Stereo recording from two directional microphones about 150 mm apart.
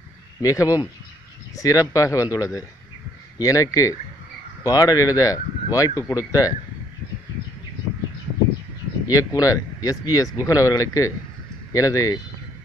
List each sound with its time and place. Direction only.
0.4 s speech: 20° left (ahead or behind)
9.0 s speech: 25° left (ahead or behind)